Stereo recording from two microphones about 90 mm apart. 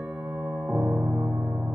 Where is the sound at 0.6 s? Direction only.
20° right (ahead or behind).